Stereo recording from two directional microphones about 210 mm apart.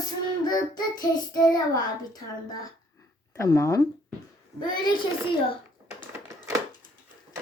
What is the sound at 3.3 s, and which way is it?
Speech, 15° left (ahead or behind).